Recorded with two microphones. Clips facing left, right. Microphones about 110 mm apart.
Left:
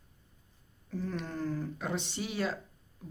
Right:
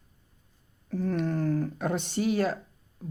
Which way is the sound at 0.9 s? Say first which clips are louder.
Right 8 dB; 50° right (ahead or behind).